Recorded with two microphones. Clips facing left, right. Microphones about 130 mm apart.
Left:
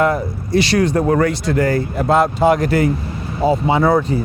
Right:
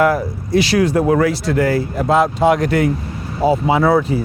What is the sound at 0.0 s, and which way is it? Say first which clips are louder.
Speech: right 1 dB; centre (ahead or behind).